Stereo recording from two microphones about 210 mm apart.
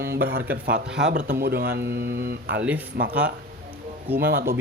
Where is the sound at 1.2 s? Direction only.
45° right (ahead or behind).